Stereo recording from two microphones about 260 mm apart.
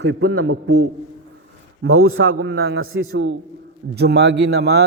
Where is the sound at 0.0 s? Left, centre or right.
Right.